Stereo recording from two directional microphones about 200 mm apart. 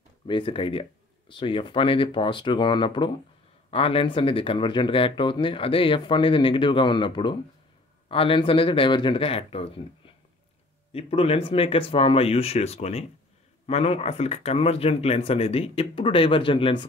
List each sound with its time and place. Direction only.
0.3 s speech: 25° left (ahead or behind)